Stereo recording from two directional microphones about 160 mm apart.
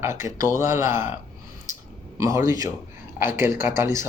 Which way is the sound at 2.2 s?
20° right (ahead or behind).